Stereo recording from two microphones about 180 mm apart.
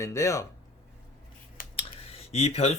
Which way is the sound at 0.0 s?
15° left (ahead or behind).